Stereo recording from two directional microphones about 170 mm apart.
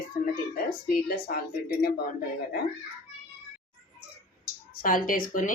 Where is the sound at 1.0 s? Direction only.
65° left (ahead or behind).